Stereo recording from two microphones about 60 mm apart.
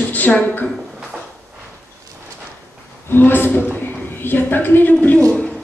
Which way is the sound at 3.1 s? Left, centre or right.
Left.